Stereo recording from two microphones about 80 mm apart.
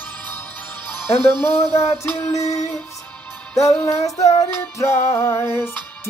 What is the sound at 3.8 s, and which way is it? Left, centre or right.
Child singing, left.